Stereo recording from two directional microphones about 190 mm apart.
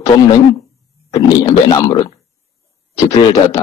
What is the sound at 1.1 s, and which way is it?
A man's voice, 20° left (ahead or behind).